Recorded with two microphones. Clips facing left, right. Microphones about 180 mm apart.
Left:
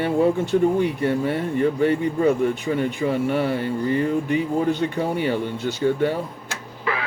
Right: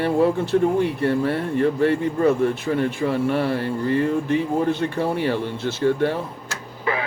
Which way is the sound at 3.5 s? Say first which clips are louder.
Right 1 dB; 15° left (ahead or behind).